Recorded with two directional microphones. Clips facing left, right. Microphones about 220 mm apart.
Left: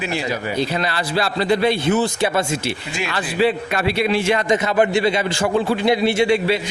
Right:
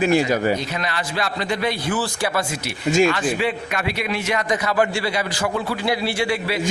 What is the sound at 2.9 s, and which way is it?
Speech, 45° right (ahead or behind).